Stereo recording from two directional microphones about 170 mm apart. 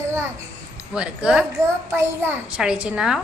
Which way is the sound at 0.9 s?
5° right (ahead or behind).